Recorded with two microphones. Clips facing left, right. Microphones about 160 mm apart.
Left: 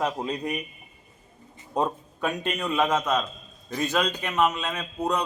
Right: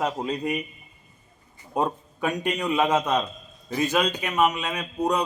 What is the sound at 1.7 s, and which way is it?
A man's voice, 10° right (ahead or behind).